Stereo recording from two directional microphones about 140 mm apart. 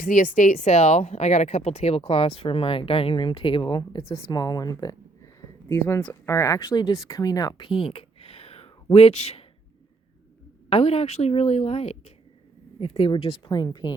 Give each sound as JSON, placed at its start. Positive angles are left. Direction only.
{"t": 0.0, "sound": "speech", "side_deg": 70}
{"t": 10.7, "sound": "speech", "side_deg": 45}